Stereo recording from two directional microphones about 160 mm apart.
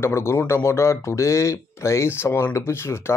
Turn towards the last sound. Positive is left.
turn(degrees=15)  # may be behind; listen again after turning